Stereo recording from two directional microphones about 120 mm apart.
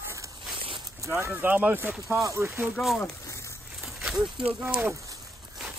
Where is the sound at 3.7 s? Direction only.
5° right (ahead or behind).